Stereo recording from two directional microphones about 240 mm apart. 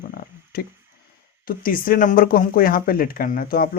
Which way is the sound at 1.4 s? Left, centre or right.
Left.